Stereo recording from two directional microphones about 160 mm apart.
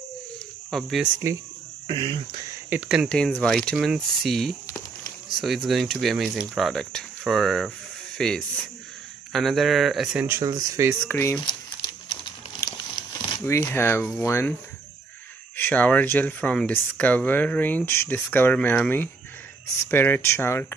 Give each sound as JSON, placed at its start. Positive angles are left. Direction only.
{"t": 0.7, "sound": "speech", "side_deg": 0}
{"t": 1.9, "sound": "speech", "side_deg": -30}
{"t": 2.7, "sound": "speech", "side_deg": -5}
{"t": 3.1, "sound": "speech", "side_deg": 5}
{"t": 10.2, "sound": "speech", "side_deg": -20}
{"t": 11.1, "sound": "speech", "side_deg": 15}
{"t": 12.1, "sound": "crumpling", "side_deg": 25}
{"t": 13.4, "sound": "speech", "side_deg": 15}
{"t": 15.5, "sound": "speech", "side_deg": 10}